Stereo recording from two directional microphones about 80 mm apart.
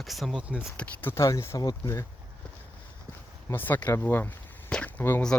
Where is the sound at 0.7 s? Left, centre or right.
Centre.